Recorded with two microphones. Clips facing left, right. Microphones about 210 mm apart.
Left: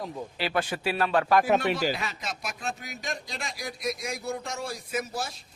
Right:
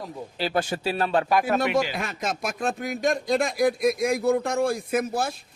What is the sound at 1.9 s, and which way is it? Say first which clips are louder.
Speech: right 3 dB; 50° right (ahead or behind).